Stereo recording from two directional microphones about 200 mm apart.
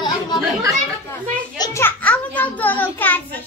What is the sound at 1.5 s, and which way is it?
Children playing, 15° left (ahead or behind).